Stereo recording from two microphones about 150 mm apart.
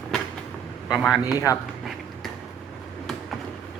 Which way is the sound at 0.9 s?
Centre (ahead or behind).